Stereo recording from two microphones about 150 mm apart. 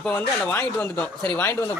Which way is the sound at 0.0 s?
10° left (ahead or behind).